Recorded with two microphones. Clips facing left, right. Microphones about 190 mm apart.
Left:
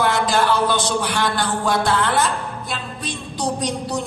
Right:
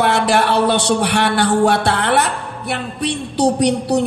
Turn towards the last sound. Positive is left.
turn(degrees=-70)  # may be behind; listen again after turning